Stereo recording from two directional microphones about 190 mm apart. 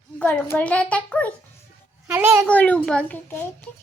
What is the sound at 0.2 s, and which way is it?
A child's voice, 10° left (ahead or behind).